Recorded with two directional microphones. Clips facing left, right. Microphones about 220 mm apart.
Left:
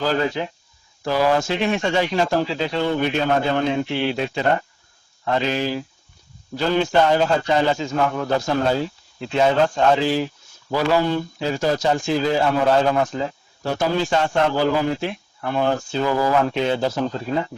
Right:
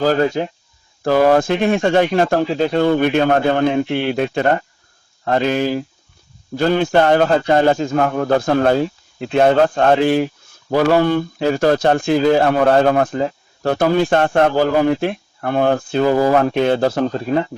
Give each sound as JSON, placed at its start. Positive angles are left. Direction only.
{"t": 0.0, "sound": "speech", "side_deg": -45}